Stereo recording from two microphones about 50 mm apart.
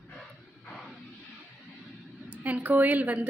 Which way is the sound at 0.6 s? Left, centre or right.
Centre.